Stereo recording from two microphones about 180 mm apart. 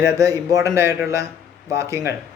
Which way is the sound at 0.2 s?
20° right (ahead or behind).